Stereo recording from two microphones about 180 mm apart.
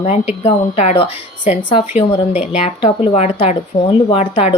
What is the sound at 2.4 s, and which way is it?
Speech, 35° left (ahead or behind).